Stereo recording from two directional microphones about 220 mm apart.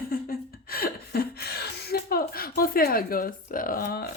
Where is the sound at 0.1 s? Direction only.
40° left (ahead or behind).